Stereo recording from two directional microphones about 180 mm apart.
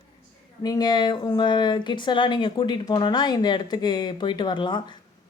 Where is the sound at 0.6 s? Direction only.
25° left (ahead or behind).